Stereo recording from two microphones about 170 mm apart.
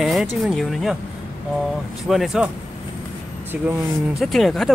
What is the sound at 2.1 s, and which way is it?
Speech, centre (ahead or behind).